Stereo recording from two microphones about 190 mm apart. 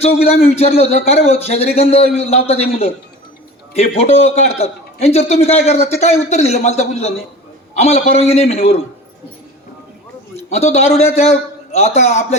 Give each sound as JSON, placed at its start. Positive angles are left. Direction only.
{"t": 0.4, "sound": "a man's voice", "side_deg": 30}
{"t": 10.3, "sound": "a man's voice", "side_deg": 35}